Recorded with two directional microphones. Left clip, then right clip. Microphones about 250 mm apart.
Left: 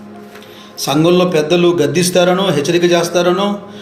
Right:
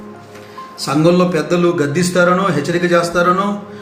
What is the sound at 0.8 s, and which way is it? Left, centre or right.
Speech, centre.